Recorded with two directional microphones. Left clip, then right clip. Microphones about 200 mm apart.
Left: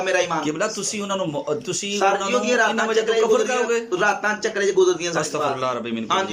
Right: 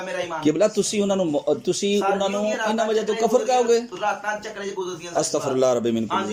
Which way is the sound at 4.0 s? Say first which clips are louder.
Left 5 dB; 60° left (ahead or behind).